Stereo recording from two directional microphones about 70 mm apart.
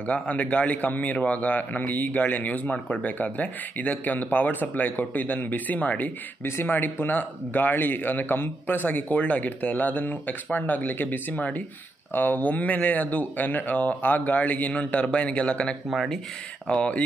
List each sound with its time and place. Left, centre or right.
0.0 s a man's voice: centre
6.4 s a man's voice: left; by 15.7 s centre
15.9 s speech: centre
16.6 s speech: centre